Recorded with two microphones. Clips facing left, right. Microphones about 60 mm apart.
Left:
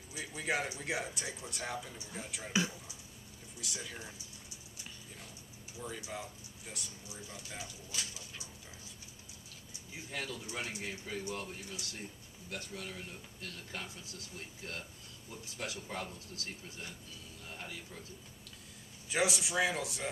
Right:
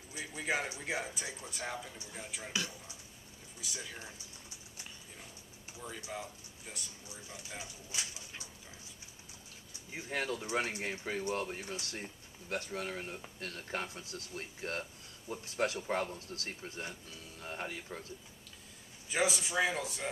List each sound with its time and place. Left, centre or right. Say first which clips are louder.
0.1 s speech: even; centre
2.5 s speech: left 5 dB; left
3.6 s speech: even; centre
6.1 s speech: right 1 dB; centre
7.5 s speech: right 1 dB; right
9.8 s speech: right 5 dB; right
19.0 s speech: even; centre